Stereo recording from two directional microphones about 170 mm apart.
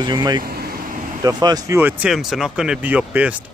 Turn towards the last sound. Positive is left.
turn(degrees=-10)  # may be behind; listen again after turning